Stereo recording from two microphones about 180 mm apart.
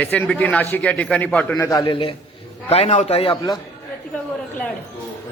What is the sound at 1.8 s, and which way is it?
A man's voice, 30° left (ahead or behind).